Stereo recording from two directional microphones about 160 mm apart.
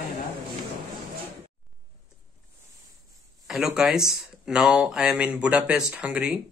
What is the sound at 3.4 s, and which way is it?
A man's voice, centre (ahead or behind).